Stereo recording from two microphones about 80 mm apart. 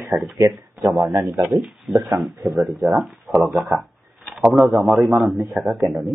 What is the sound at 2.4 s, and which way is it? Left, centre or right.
A man's voice, centre.